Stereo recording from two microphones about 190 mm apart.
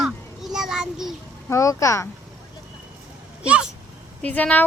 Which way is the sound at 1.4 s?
15° left (ahead or behind).